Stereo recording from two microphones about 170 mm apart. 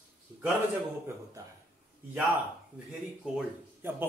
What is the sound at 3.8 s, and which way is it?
Speech, 10° right (ahead or behind).